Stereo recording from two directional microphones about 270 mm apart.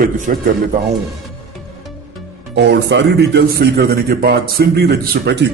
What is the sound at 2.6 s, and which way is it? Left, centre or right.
A man's voice, right.